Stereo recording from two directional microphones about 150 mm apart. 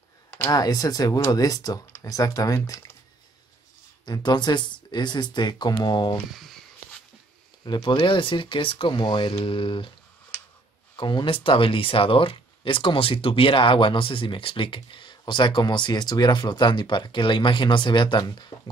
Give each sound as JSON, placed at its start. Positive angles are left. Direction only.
{"t": 0.3, "sound": "speech", "side_deg": 20}
{"t": 4.0, "sound": "speech", "side_deg": 30}
{"t": 6.1, "sound": "speech", "side_deg": 0}
{"t": 7.6, "sound": "speech", "side_deg": 30}
{"t": 11.0, "sound": "speech", "side_deg": 30}